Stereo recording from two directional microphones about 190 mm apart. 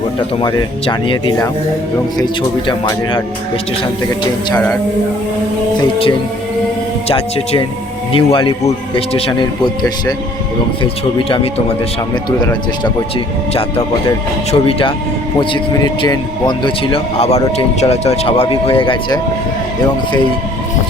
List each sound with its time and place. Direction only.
0.4 s a man's voice: 25° left (ahead or behind)
5.7 s a man's voice: 25° left (ahead or behind)
11.3 s a man's voice: 30° left (ahead or behind)
12.8 s a man's voice: 30° left (ahead or behind)